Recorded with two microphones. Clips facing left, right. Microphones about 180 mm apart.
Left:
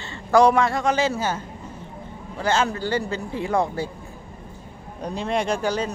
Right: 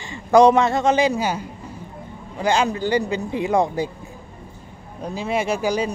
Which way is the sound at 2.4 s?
15° right (ahead or behind).